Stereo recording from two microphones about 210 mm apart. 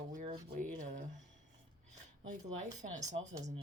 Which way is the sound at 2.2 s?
35° right (ahead or behind).